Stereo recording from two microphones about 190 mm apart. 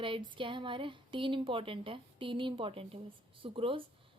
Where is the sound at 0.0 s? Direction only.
25° right (ahead or behind).